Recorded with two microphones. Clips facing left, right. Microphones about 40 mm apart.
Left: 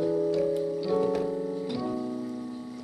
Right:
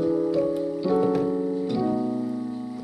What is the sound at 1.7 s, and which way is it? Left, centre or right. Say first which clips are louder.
Music: right 6 dB; centre.